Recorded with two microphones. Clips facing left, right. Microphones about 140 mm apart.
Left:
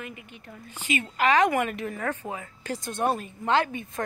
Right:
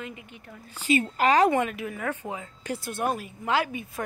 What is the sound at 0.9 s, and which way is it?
Speech, 35° right (ahead or behind).